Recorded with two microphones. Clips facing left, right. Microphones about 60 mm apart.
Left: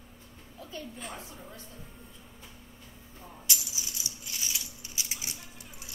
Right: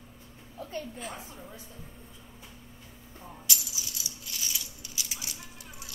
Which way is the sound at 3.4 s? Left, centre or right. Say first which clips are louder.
Even; left.